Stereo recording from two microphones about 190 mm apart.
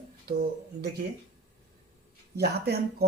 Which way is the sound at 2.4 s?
55° right (ahead or behind).